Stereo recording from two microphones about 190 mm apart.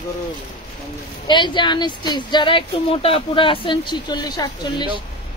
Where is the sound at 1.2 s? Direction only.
25° left (ahead or behind).